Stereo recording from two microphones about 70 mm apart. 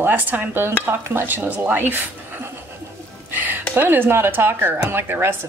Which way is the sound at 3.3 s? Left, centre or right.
Right.